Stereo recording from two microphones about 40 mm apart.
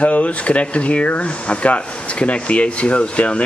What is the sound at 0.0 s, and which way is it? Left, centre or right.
Speech, left.